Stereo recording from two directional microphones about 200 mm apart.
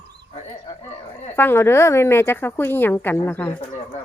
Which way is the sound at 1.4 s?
10° left (ahead or behind).